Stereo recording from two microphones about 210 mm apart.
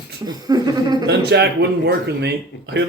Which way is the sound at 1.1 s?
55° right (ahead or behind).